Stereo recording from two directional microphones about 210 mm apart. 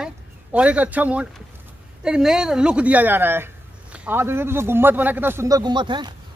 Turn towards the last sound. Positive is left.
turn(degrees=-20)  # may be behind; listen again after turning